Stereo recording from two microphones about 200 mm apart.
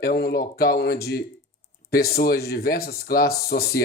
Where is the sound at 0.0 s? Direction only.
50° left (ahead or behind).